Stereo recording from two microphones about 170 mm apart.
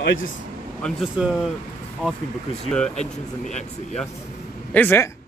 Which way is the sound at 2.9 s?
45° left (ahead or behind).